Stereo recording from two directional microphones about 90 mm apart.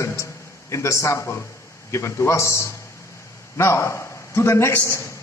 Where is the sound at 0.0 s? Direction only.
35° left (ahead or behind).